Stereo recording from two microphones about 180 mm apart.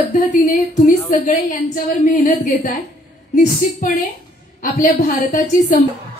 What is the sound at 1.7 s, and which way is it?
A woman's voice, 45° left (ahead or behind).